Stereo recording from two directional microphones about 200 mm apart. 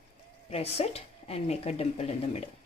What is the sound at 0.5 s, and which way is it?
Speech, 30° left (ahead or behind).